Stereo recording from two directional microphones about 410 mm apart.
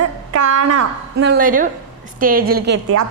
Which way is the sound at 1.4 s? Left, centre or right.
Centre.